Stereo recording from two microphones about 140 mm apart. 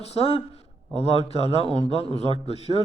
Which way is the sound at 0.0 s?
50° left (ahead or behind).